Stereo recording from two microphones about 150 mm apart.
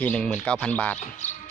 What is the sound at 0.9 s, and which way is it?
Speech, 50° left (ahead or behind).